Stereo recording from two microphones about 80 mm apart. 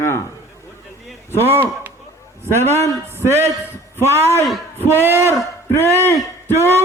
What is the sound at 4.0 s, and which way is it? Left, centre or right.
Speech, right.